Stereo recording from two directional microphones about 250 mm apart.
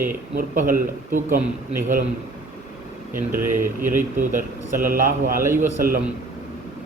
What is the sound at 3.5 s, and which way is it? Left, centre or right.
Speech, centre.